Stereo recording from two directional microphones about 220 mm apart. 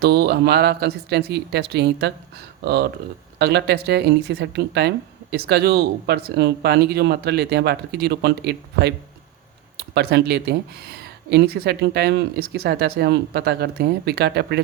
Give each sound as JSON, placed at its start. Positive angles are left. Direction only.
{"t": 0.0, "sound": "speech", "side_deg": -45}